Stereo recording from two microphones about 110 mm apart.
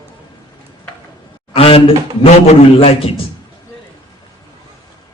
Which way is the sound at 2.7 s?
60° left (ahead or behind).